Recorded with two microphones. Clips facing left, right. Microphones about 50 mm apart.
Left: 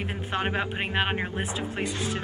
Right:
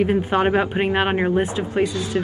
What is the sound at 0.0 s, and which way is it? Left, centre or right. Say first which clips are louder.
Speech: right 11 dB; centre.